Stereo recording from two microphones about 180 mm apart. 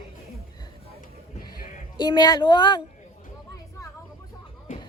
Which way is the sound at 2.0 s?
25° left (ahead or behind).